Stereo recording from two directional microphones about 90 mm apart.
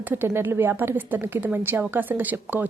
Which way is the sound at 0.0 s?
25° right (ahead or behind).